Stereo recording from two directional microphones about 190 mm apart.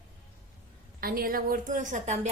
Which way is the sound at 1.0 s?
50° right (ahead or behind).